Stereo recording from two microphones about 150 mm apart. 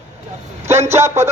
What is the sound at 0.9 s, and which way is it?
Speech, 20° right (ahead or behind).